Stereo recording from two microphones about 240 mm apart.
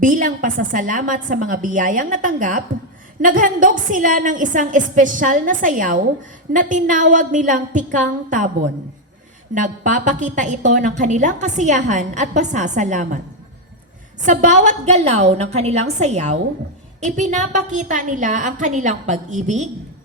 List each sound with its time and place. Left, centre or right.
0.0 s a woman's voice: right
9.6 s a woman's voice: right
14.3 s a woman's voice: right